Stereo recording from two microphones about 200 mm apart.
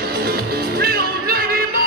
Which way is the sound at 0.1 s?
50° right (ahead or behind).